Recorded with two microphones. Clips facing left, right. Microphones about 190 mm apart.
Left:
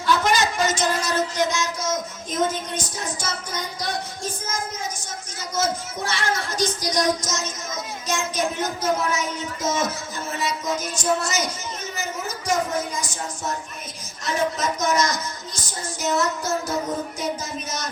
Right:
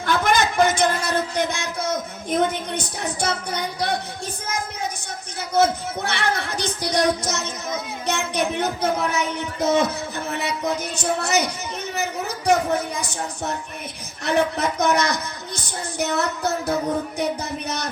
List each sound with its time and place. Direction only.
0.0 s music: 55° right (ahead or behind)
4.4 s a sound: 65° right (ahead or behind)
5.5 s child singing: 60° right (ahead or behind)
12.5 s speech: 60° right (ahead or behind)